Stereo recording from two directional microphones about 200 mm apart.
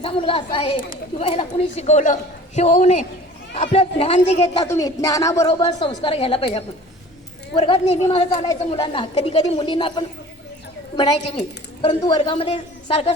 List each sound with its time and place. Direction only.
0.0 s a woman's voice: 25° left (ahead or behind)
4.7 s speech: 15° left (ahead or behind)
5.5 s a woman's voice: 25° left (ahead or behind)